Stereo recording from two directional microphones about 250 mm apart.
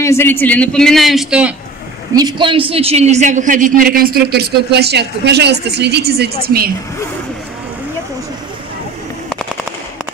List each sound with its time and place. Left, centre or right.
0.0 s a man's voice: centre
2.1 s a man's voice: centre; by 6.7 s right